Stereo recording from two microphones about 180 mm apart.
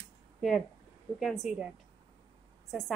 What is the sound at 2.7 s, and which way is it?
Speech, centre (ahead or behind).